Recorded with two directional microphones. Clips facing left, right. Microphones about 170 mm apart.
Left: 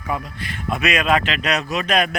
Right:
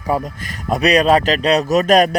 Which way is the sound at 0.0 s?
40° right (ahead or behind).